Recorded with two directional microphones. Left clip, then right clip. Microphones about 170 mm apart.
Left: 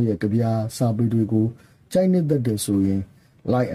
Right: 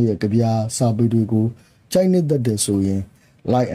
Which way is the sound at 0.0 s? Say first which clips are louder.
Right 3 dB; 25° right (ahead or behind).